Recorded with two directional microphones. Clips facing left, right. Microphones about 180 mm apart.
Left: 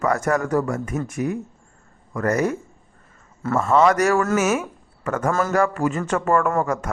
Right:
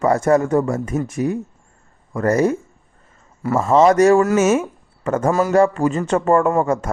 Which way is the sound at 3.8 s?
30° right (ahead or behind).